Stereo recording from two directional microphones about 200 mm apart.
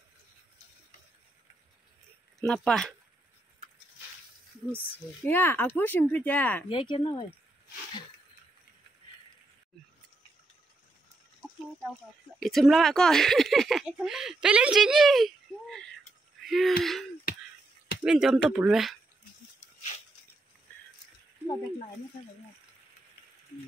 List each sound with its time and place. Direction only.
2.4 s speech: centre (ahead or behind)
5.2 s speech: 10° left (ahead or behind)
6.7 s speech: 25° left (ahead or behind)
12.4 s speech: centre (ahead or behind)
18.0 s speech: 5° right (ahead or behind)